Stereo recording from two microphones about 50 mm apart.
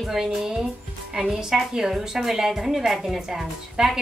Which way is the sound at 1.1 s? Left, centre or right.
Centre.